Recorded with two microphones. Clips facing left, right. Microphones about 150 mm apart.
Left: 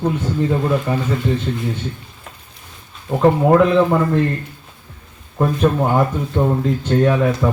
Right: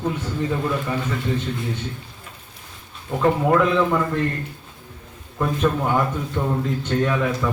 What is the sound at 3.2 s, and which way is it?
Speech, 30° left (ahead or behind).